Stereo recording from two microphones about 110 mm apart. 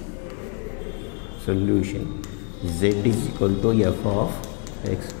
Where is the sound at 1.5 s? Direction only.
10° left (ahead or behind).